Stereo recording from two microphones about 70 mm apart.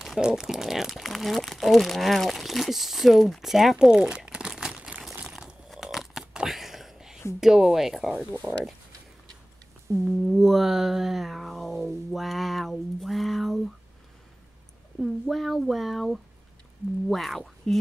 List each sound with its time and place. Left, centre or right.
0.0 s a sound: centre
0.3 s speech: centre
5.3 s crunch: centre
6.3 s a sound: centre
7.3 s speech: centre
9.9 s speech: right
10.2 s speech: centre
15.0 s speech: centre